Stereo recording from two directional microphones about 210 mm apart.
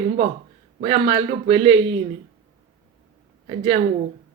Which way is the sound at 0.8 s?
25° right (ahead or behind).